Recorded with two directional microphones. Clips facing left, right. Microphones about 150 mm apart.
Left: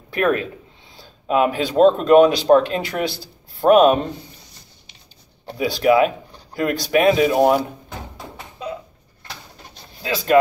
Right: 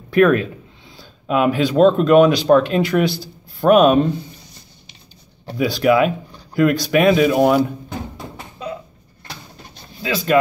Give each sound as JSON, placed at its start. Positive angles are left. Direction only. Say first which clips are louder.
{"t": 0.1, "sound": "speech", "louder": "right 6 dB", "side_deg": 25}
{"t": 5.5, "sound": "speech", "louder": "right 1 dB", "side_deg": 25}